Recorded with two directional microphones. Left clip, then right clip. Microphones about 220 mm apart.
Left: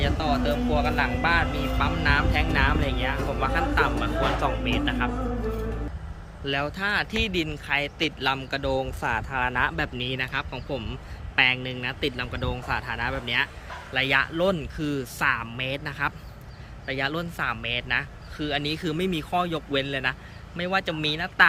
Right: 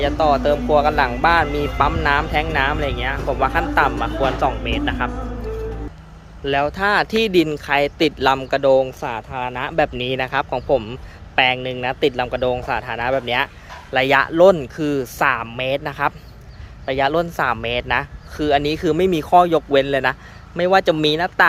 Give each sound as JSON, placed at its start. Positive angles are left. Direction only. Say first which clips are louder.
{"t": 0.0, "sound": "speech", "louder": "right 10 dB", "side_deg": -15}
{"t": 6.4, "sound": "speech", "louder": "right 9 dB", "side_deg": -15}